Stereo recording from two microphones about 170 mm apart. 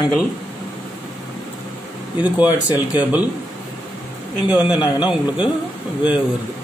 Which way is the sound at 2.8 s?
10° right (ahead or behind).